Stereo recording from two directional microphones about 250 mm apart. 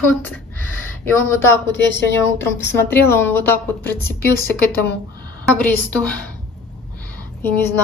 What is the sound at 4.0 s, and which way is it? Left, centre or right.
Speech, left.